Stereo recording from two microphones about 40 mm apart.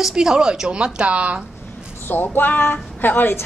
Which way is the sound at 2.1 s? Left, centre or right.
Left.